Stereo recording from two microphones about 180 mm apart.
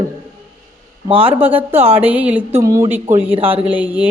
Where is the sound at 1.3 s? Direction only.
10° right (ahead or behind).